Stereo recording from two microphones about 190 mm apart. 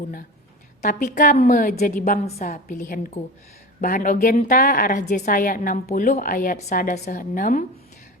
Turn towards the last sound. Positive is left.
turn(degrees=45)  # may be behind; listen again after turning